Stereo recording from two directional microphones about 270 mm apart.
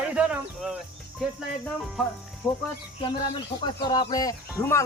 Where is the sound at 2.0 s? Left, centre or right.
Centre.